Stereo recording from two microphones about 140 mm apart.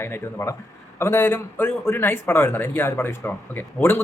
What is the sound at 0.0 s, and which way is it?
A man's voice, 20° left (ahead or behind).